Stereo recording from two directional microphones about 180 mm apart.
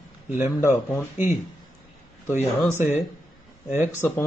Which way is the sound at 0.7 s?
15° left (ahead or behind).